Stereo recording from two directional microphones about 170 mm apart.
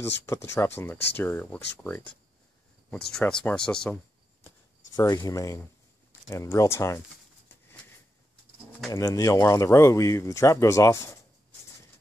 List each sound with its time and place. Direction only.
0.3 s speech: 15° left (ahead or behind)
4.9 s speech: 20° left (ahead or behind)
8.9 s speech: 20° left (ahead or behind)